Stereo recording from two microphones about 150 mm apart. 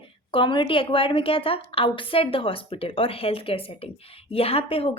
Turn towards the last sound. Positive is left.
turn(degrees=40)  # may be behind; listen again after turning